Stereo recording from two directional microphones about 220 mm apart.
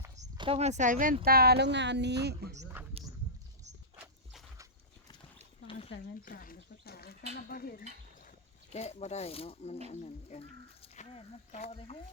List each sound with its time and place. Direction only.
0.2 s speech: 25° right (ahead or behind); by 2.6 s 50° right (ahead or behind)
3.0 s a sound: 25° right (ahead or behind)
4.0 s horse: 10° right (ahead or behind)
5.9 s speech: 40° left (ahead or behind)
8.7 s speech: 30° left (ahead or behind)